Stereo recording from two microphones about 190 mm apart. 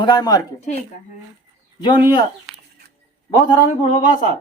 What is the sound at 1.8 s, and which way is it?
Speech, 25° left (ahead or behind).